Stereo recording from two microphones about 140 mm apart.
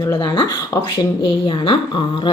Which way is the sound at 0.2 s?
30° left (ahead or behind).